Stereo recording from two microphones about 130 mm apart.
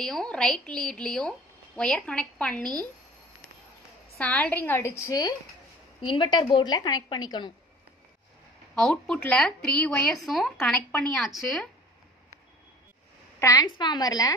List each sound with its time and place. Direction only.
0.0 s a woman's voice: 5° left (ahead or behind)
4.2 s a woman's voice: 10° left (ahead or behind)
6.0 s a woman's voice: 35° left (ahead or behind)
8.9 s speech: 10° left (ahead or behind)
13.4 s a woman's voice: 30° left (ahead or behind)